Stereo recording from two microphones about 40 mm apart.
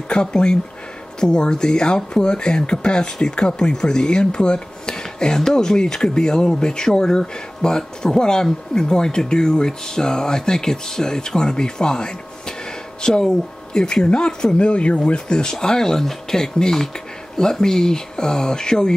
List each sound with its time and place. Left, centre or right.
0.1 s speech: left